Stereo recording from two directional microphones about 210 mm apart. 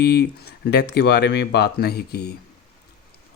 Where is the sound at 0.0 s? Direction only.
50° left (ahead or behind).